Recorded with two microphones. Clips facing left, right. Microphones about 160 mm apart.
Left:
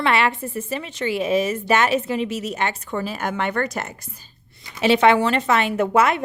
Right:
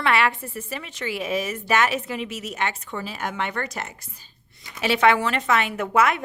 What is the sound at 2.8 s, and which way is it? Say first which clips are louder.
Speech: left 5 dB; 45° left (ahead or behind).